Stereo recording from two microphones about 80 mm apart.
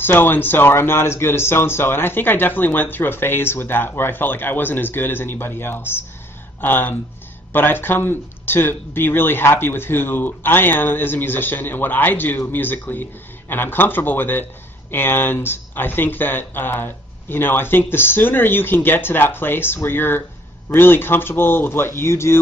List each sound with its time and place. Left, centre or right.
0.0 s speech: left